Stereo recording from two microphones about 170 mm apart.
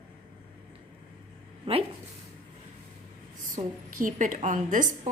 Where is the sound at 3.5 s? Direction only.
50° right (ahead or behind).